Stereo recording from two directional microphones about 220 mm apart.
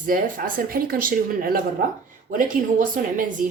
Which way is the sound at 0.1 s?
40° right (ahead or behind).